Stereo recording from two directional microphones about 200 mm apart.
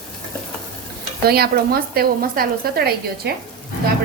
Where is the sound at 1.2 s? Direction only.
50° right (ahead or behind).